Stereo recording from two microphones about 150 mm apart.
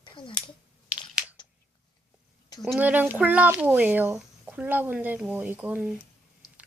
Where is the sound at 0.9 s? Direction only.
10° right (ahead or behind).